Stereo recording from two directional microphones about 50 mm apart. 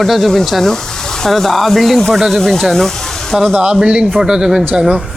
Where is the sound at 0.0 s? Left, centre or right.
Centre.